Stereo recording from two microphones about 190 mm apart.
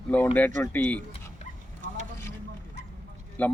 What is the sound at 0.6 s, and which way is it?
Speech, 10° left (ahead or behind).